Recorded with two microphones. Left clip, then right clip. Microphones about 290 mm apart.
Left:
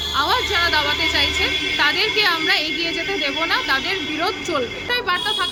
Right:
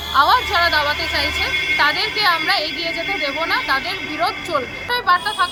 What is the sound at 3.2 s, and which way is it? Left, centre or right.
Speech, centre.